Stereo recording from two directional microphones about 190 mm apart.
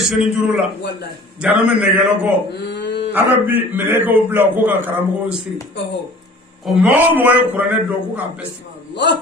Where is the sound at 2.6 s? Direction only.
65° left (ahead or behind).